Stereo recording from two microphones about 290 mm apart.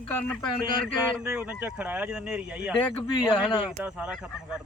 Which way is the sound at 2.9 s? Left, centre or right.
Centre.